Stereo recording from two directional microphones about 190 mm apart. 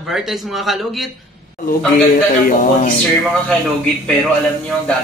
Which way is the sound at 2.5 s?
40° left (ahead or behind).